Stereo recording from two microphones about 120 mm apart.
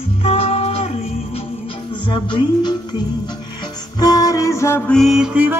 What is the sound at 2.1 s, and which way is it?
Music, 40° left (ahead or behind).